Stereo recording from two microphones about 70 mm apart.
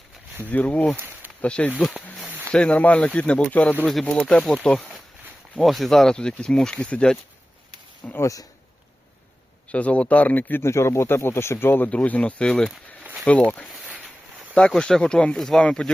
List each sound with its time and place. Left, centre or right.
0.4 s speech: left
0.9 s a sound: right
1.4 s speech: centre
4.2 s speech: centre
5.5 s speech: centre
8.2 s speech: left
9.7 s speech: centre
10.6 s speech: left
11.9 s speech: centre
14.8 s speech: centre